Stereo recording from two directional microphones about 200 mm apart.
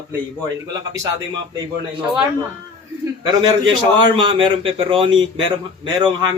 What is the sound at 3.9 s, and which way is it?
A man's voice, 25° right (ahead or behind).